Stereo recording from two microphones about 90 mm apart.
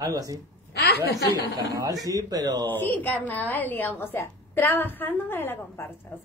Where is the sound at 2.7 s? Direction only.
20° left (ahead or behind).